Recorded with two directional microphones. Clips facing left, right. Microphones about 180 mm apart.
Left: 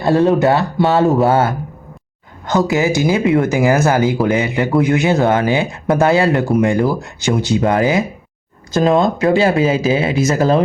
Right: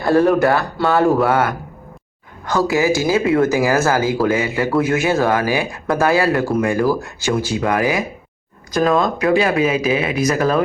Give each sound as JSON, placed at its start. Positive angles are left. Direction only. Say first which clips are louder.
{"t": 0.0, "sound": "speech", "louder": "left 1 dB", "side_deg": 20}